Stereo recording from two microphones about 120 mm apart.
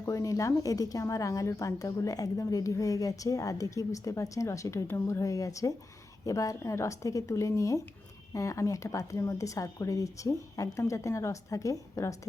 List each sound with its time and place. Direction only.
0.0 s a woman's voice: 25° left (ahead or behind)